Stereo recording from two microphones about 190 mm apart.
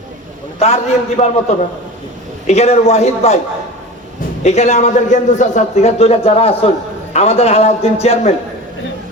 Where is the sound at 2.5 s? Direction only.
35° left (ahead or behind).